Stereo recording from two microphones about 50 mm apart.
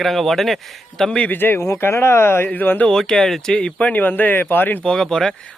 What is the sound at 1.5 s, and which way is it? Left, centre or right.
Speech, left.